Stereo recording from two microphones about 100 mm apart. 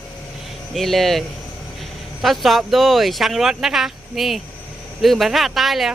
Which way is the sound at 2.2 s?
Centre (ahead or behind).